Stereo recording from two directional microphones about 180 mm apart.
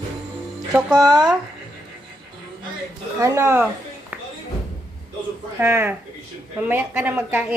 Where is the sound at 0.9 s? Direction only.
20° right (ahead or behind).